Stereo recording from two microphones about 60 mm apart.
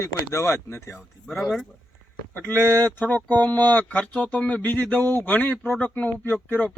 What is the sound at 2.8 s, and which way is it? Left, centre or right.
Speech, left.